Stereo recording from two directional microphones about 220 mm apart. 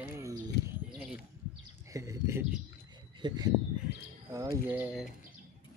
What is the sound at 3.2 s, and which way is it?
Speech, 20° right (ahead or behind).